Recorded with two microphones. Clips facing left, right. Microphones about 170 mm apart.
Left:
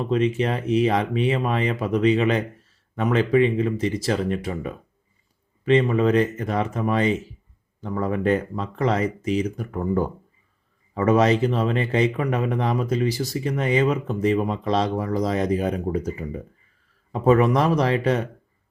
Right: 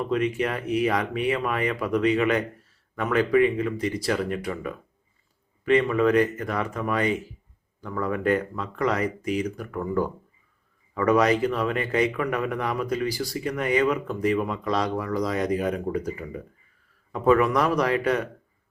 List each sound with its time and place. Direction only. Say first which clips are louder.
0.0 s speech: left 3 dB; 25° left (ahead or behind)